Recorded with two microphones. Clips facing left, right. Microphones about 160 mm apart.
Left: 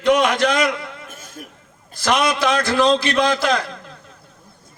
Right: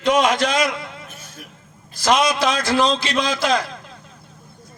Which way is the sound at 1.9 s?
60° left (ahead or behind).